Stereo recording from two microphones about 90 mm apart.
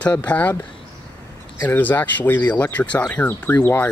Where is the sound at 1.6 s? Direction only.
20° left (ahead or behind).